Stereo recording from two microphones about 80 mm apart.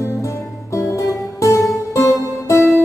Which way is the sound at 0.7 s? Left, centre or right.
Left.